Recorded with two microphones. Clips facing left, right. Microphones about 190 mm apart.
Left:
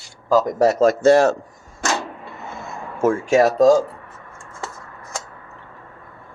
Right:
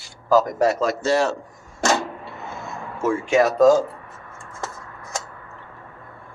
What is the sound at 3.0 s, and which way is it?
Speech, 45° left (ahead or behind).